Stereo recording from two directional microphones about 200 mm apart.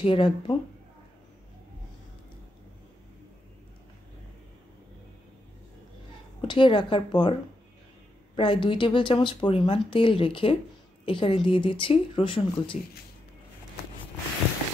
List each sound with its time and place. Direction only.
0.0 s speech: 25° left (ahead or behind)
6.4 s speech: 25° left (ahead or behind)
8.4 s speech: 25° left (ahead or behind)